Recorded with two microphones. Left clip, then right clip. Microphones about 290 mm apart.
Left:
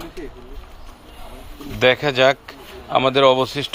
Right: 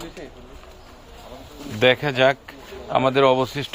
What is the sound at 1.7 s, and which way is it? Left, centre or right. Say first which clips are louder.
Speech: left 2 dB; centre.